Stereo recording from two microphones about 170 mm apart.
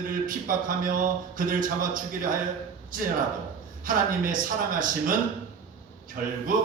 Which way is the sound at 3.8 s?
55° right (ahead or behind).